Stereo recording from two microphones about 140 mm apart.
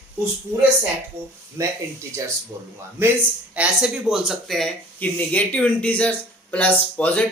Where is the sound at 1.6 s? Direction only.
20° right (ahead or behind).